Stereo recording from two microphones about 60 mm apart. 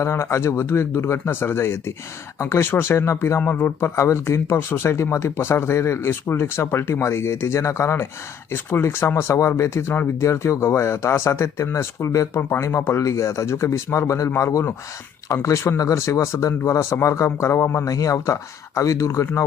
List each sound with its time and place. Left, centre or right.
0.0 s speech: left
12.4 s speech: left
12.6 s speech: left
17.8 s speech: left